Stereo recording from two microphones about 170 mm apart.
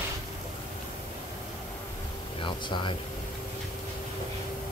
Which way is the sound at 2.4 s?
30° left (ahead or behind).